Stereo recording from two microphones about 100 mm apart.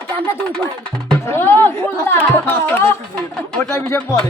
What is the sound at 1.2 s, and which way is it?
Speech, 25° left (ahead or behind).